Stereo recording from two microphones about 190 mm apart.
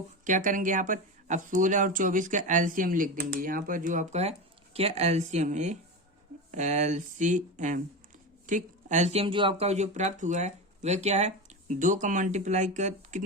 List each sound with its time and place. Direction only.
0.3 s speech: 45° right (ahead or behind)